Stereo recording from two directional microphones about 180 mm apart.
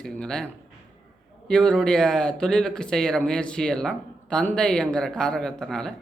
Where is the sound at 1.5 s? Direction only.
5° left (ahead or behind).